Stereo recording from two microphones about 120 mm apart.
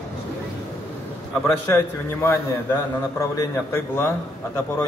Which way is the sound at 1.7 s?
25° left (ahead or behind).